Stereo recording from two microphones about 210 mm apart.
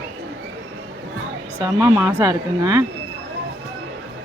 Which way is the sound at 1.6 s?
15° right (ahead or behind).